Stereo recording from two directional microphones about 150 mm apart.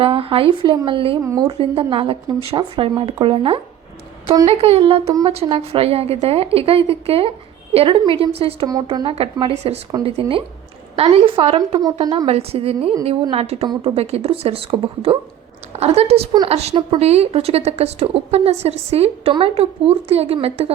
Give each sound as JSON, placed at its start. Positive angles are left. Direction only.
{"t": 0.0, "sound": "a woman's voice", "side_deg": -35}
{"t": 1.2, "sound": "a woman's voice", "side_deg": -25}
{"t": 1.5, "sound": "a woman's voice", "side_deg": -35}
{"t": 11.8, "sound": "a woman's voice", "side_deg": -25}